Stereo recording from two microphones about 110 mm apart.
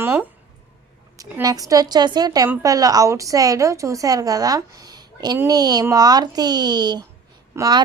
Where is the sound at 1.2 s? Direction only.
35° right (ahead or behind).